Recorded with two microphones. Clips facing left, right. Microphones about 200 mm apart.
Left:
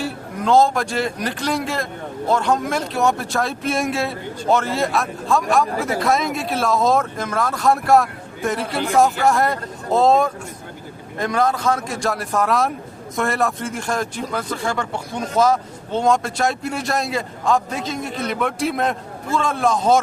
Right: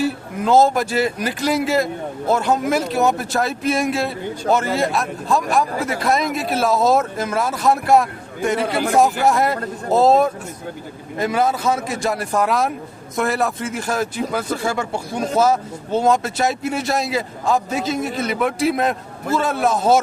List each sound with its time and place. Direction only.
0.0 s a man's voice: 5° right (ahead or behind)